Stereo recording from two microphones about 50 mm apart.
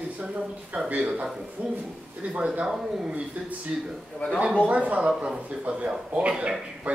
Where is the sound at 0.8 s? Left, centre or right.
Right.